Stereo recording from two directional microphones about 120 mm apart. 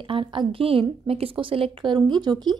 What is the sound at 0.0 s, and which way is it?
A woman's voice, 45° right (ahead or behind).